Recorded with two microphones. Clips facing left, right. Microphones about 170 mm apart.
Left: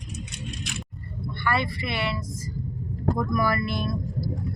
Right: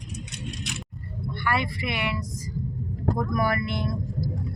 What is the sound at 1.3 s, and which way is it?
Speech, 10° right (ahead or behind).